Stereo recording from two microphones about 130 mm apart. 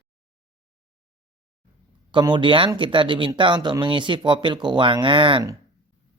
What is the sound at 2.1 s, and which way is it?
Speech, 35° right (ahead or behind).